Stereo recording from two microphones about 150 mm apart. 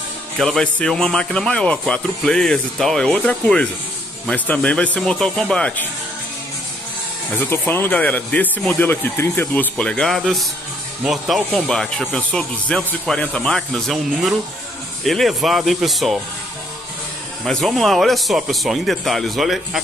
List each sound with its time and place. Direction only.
0.4 s speech: 5° left (ahead or behind)
7.3 s speech: 15° left (ahead or behind)
17.5 s speech: centre (ahead or behind)